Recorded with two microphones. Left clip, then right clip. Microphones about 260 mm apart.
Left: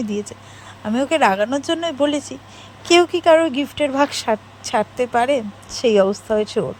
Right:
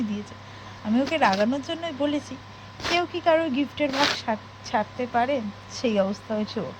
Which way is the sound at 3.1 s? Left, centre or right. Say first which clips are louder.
Left 8 dB; left.